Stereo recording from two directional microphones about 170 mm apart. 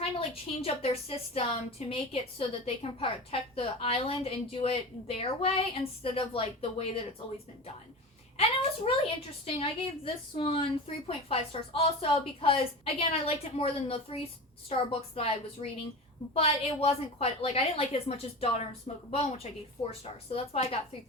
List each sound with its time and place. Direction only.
0.0 s a woman's voice: 35° left (ahead or behind)
8.4 s a woman's voice: 35° left (ahead or behind)